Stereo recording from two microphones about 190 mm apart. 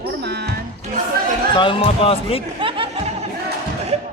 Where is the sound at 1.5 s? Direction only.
25° left (ahead or behind).